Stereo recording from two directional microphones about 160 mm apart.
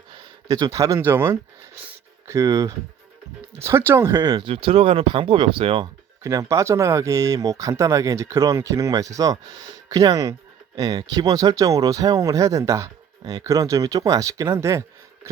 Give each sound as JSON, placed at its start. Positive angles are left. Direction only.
{"t": 0.4, "sound": "speech", "side_deg": -20}
{"t": 6.2, "sound": "speech", "side_deg": -20}